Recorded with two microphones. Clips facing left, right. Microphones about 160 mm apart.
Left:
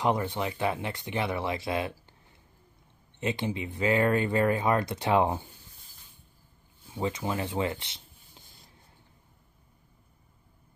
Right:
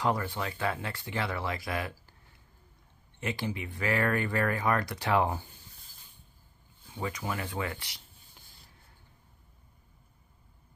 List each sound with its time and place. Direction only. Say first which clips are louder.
0.0 s speech: left 3 dB; 20° left (ahead or behind)
3.2 s speech: left 4 dB; 20° left (ahead or behind)
6.9 s speech: left 4 dB; 25° left (ahead or behind)